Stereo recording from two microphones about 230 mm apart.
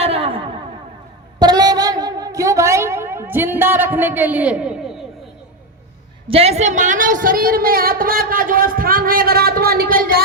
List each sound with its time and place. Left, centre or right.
0.0 s a sound: right
1.4 s a woman's voice: centre
6.2 s a woman's voice: right